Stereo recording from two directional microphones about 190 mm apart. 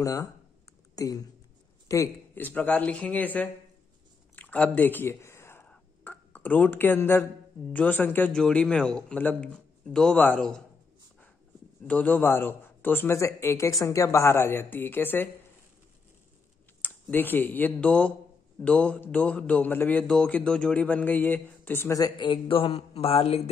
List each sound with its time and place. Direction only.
0.0 s speech: 15° left (ahead or behind)
4.4 s a sound: 10° left (ahead or behind)
7.7 s a man's voice: 10° left (ahead or behind)
11.8 s speech: 10° left (ahead or behind)
16.8 s speech: 10° left (ahead or behind); by 23.5 s 30° left (ahead or behind)